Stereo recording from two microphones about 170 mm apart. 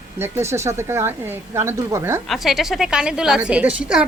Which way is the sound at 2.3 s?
Centre (ahead or behind).